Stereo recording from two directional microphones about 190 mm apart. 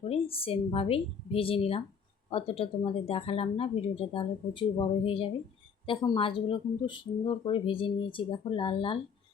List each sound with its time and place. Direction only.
0.1 s a woman's voice: 30° left (ahead or behind)